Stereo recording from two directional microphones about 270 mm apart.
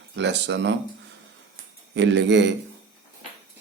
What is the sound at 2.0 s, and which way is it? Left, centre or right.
Speech, right.